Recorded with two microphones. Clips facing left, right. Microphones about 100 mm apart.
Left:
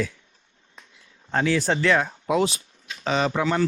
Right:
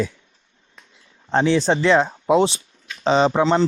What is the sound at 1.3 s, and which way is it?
A man's voice, 25° right (ahead or behind).